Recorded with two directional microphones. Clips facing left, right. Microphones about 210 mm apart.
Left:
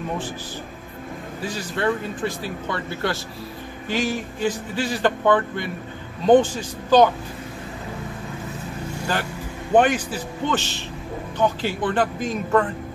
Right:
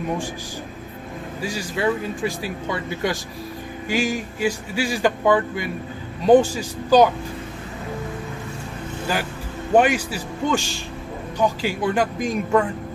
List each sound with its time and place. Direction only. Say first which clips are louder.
1.4 s speech: right 1 dB; 10° right (ahead or behind)
9.8 s speech: even; 10° right (ahead or behind)